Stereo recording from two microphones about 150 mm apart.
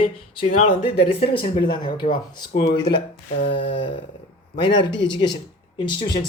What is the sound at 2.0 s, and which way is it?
Speech, 70° left (ahead or behind).